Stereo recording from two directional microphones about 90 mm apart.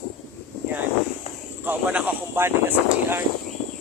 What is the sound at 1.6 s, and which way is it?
Speech, 20° right (ahead or behind).